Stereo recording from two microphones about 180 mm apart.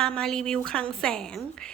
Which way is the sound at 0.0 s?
5° left (ahead or behind).